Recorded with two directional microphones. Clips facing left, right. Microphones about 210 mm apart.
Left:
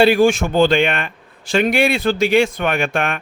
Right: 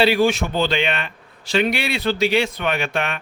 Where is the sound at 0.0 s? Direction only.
50° left (ahead or behind).